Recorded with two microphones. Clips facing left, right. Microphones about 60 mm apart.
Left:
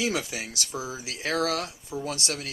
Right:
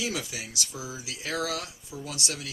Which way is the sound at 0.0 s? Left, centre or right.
Left.